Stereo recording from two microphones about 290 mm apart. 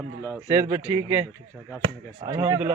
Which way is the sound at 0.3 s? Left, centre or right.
Centre.